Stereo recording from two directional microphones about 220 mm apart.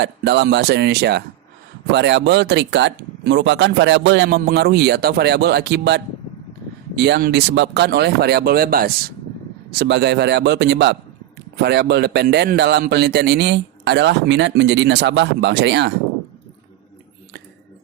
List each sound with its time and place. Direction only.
0.0 s a man's voice: 50° right (ahead or behind)